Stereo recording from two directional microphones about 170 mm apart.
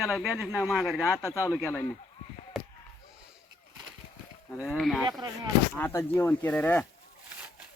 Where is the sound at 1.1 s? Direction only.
15° left (ahead or behind).